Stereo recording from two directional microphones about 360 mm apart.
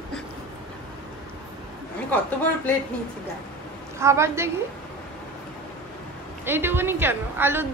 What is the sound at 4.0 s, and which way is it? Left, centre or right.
Speech, centre.